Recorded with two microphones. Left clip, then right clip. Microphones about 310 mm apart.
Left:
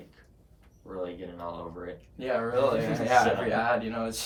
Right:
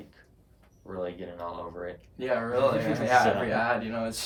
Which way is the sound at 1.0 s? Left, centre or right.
Right.